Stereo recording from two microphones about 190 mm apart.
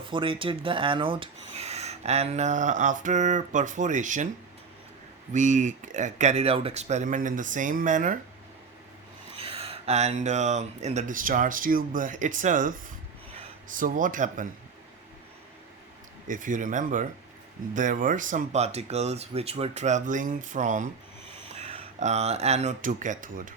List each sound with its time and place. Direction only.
0.0 s speech: 25° right (ahead or behind)
5.3 s speech: 40° right (ahead or behind)
9.4 s speech: 30° right (ahead or behind)
13.7 s speech: 45° right (ahead or behind)
16.3 s speech: 45° right (ahead or behind)